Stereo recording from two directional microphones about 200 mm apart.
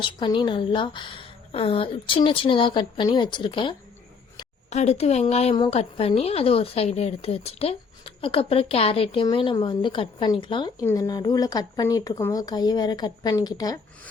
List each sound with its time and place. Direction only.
0.0 s a woman's voice: 25° left (ahead or behind)
4.7 s a woman's voice: 35° left (ahead or behind); by 13.7 s 20° left (ahead or behind)